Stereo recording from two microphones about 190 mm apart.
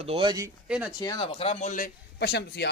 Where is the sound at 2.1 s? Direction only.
60° left (ahead or behind).